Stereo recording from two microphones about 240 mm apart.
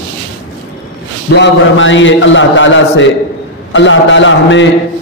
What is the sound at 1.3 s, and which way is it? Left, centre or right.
A man's voice, left.